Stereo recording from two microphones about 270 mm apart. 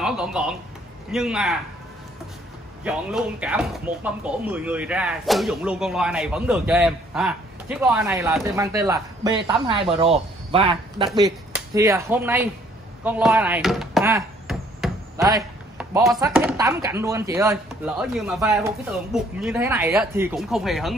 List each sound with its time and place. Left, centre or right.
0.0 s speech: centre
2.8 s speech: centre
13.0 s a sound: centre
16.2 s speech: centre